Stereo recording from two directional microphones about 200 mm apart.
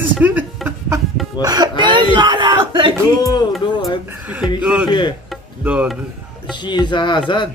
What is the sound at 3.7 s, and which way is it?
Speech, 25° left (ahead or behind).